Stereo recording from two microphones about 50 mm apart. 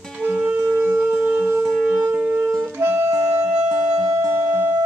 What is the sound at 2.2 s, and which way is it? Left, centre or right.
Wind instrument, right.